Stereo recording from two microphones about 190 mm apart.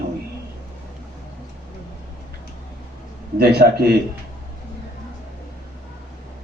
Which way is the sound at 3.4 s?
55° right (ahead or behind).